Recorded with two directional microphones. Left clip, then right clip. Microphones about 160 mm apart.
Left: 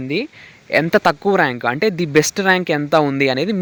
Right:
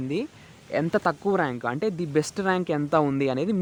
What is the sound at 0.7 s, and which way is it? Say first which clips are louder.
Speech: left 10 dB; 25° left (ahead or behind).